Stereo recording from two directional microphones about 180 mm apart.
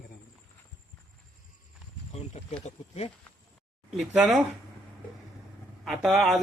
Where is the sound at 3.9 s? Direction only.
5° right (ahead or behind).